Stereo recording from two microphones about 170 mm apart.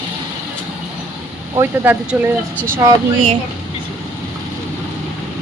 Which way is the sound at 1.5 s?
15° right (ahead or behind).